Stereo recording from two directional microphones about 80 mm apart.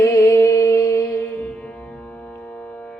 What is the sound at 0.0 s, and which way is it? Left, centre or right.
Music, left.